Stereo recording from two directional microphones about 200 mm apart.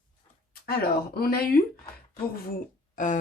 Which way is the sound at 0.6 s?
50° left (ahead or behind).